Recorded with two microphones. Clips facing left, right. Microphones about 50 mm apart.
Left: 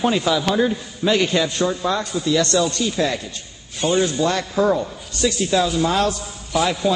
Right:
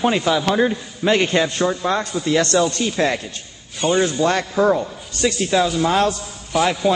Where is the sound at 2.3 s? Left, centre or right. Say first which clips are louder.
Right 2 dB; right.